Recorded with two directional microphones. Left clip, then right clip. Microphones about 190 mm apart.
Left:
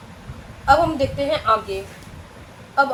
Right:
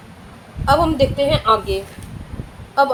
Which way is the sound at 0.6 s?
65° right (ahead or behind).